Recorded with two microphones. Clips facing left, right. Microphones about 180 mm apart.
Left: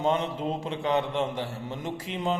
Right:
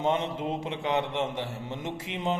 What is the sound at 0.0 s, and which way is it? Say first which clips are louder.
A man's voice: left 1 dB; 20° right (ahead or behind).